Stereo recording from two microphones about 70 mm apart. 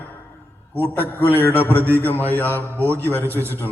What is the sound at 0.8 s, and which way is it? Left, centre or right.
A man's voice, left.